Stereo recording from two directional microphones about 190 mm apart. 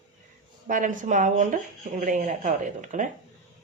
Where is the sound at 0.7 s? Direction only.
40° right (ahead or behind).